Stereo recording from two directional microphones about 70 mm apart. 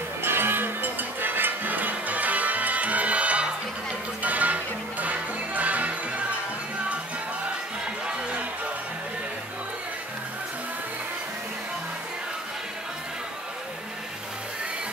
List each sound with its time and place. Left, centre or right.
0.2 s music: right